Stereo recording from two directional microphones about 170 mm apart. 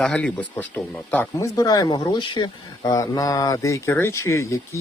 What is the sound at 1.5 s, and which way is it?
Speech, 20° left (ahead or behind).